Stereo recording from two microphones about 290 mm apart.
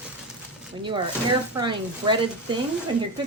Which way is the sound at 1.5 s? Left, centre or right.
Centre.